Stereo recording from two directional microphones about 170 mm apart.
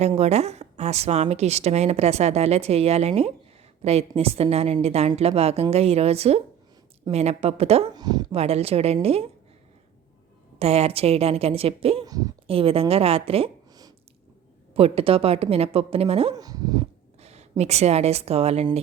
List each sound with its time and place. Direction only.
0.2 s a woman's voice: 40° right (ahead or behind)
7.9 s speech: 25° right (ahead or behind)
8.4 s a woman's voice: 35° right (ahead or behind)
10.6 s a woman's voice: 35° right (ahead or behind)
12.0 s speech: 20° right (ahead or behind)
12.5 s a woman's voice: 35° right (ahead or behind)
14.7 s a woman's voice: 35° right (ahead or behind)
16.3 s speech: 20° right (ahead or behind)
17.2 s a sound: 40° right (ahead or behind)
17.6 s a woman's voice: 40° right (ahead or behind)